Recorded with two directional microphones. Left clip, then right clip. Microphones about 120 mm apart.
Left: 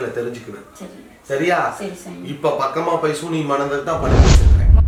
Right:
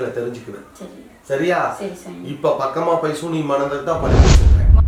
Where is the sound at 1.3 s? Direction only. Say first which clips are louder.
Even; centre (ahead or behind).